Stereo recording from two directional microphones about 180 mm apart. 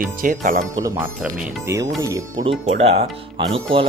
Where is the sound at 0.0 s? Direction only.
45° right (ahead or behind).